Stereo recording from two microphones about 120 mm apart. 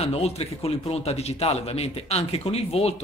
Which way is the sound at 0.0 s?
60° left (ahead or behind).